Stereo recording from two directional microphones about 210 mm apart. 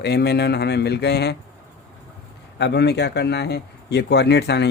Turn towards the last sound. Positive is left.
turn(degrees=55)  # may be behind; listen again after turning